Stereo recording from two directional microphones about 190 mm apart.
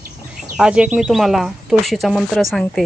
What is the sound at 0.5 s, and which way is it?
Speech, 5° right (ahead or behind).